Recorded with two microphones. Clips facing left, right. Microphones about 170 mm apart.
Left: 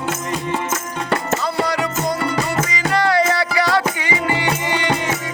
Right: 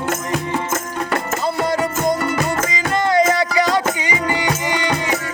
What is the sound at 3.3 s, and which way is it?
Music, 20° right (ahead or behind).